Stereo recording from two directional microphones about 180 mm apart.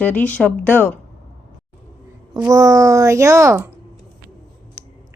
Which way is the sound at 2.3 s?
20° right (ahead or behind).